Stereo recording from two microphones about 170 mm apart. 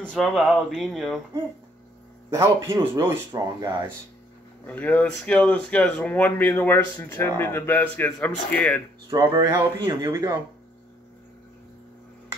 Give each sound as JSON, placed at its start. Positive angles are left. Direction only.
{"t": 0.1, "sound": "speech", "side_deg": 0}
{"t": 2.3, "sound": "speech", "side_deg": -15}
{"t": 4.6, "sound": "speech", "side_deg": 10}
{"t": 9.1, "sound": "a man's voice", "side_deg": -25}